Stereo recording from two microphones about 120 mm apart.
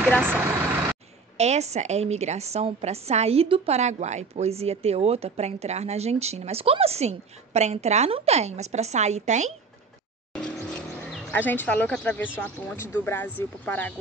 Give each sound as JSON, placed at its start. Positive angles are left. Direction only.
{"t": 1.4, "sound": "a woman's voice", "side_deg": -65}
{"t": 3.7, "sound": "a woman's voice", "side_deg": -70}
{"t": 10.3, "sound": "vehicle", "side_deg": 10}
{"t": 11.3, "sound": "speech", "side_deg": 15}